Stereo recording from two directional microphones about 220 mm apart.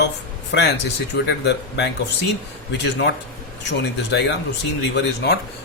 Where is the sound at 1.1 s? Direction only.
50° left (ahead or behind).